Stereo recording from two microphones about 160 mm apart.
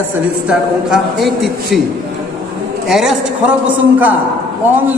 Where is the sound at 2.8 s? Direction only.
Centre (ahead or behind).